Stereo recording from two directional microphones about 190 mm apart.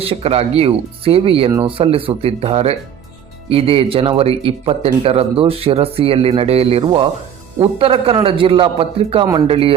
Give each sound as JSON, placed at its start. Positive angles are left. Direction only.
{"t": 0.0, "sound": "speech", "side_deg": -30}